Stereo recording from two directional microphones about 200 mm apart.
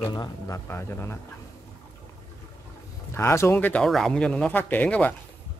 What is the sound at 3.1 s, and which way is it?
Speech, 10° left (ahead or behind).